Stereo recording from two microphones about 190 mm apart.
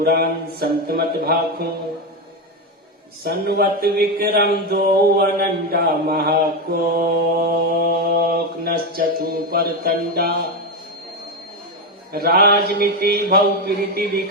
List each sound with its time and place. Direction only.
0.0 s mantra: 55° right (ahead or behind)
3.2 s mantra: 55° right (ahead or behind)
12.1 s mantra: 55° right (ahead or behind)